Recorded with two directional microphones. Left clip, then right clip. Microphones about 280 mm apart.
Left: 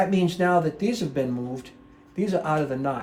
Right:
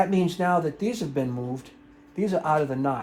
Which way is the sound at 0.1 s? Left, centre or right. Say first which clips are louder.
Left 2 dB; centre.